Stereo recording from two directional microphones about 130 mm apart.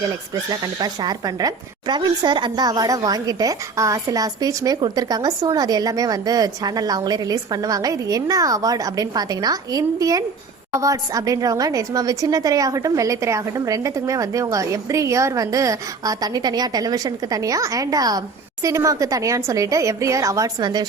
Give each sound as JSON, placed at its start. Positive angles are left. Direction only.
{"t": 0.6, "sound": "a woman's voice", "side_deg": -30}